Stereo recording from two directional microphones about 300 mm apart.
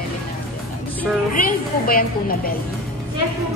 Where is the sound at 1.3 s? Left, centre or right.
Left.